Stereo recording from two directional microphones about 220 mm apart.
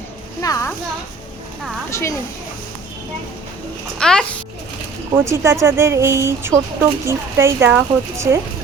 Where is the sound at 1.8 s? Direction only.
15° left (ahead or behind).